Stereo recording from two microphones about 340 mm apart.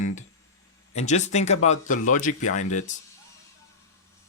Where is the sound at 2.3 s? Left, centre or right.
Left.